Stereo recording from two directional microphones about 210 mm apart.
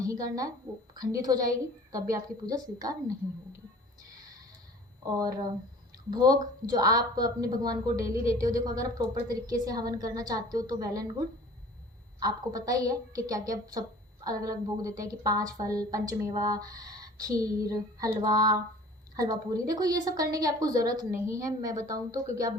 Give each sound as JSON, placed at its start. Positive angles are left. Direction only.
{"t": 0.0, "sound": "speech", "side_deg": -15}
{"t": 1.5, "sound": "a woman's voice", "side_deg": -15}
{"t": 5.0, "sound": "a woman's voice", "side_deg": -15}
{"t": 12.2, "sound": "a woman's voice", "side_deg": -15}